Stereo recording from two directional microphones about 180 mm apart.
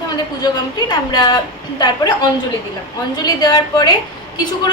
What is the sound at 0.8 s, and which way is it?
Speech, 25° left (ahead or behind).